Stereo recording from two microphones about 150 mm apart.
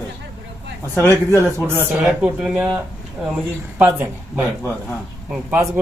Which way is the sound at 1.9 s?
5° right (ahead or behind).